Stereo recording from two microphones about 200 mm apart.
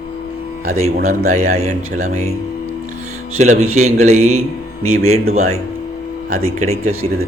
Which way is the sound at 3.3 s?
35° right (ahead or behind).